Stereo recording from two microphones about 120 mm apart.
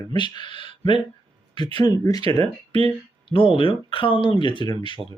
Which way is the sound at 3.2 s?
50° left (ahead or behind).